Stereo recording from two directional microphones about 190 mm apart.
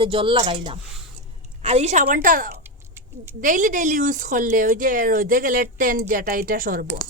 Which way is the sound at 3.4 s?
45° right (ahead or behind).